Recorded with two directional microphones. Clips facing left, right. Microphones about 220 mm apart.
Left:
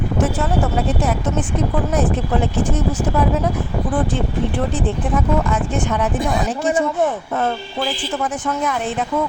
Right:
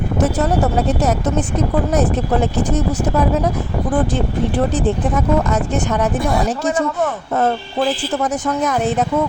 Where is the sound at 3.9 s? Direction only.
40° right (ahead or behind).